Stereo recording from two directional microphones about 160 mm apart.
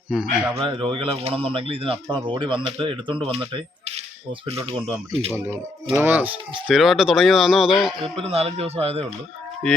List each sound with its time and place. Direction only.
0.1 s speech: 5° right (ahead or behind)
0.5 s speech: 35° right (ahead or behind)
5.3 s speech: 15° right (ahead or behind)
8.0 s speech: 35° right (ahead or behind)
9.6 s speech: 5° left (ahead or behind)